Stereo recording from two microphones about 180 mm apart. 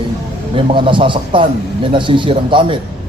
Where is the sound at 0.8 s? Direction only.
25° right (ahead or behind).